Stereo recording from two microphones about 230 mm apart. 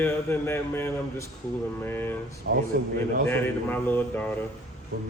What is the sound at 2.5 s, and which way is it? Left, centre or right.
Speech, right.